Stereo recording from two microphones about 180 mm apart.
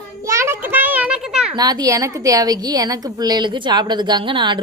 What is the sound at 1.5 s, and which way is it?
A woman's voice, 20° right (ahead or behind).